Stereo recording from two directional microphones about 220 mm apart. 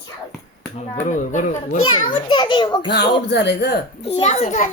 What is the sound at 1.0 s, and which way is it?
Speech, 35° left (ahead or behind).